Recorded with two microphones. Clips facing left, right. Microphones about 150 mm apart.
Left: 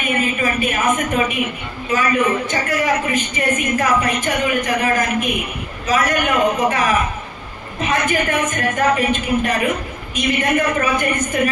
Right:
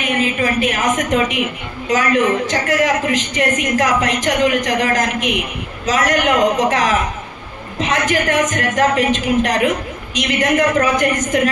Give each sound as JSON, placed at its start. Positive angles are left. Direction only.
{"t": 0.0, "sound": "a woman's voice", "side_deg": -90}